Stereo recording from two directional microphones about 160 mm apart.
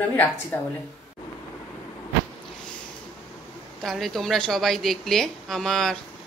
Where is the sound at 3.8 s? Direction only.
Centre (ahead or behind).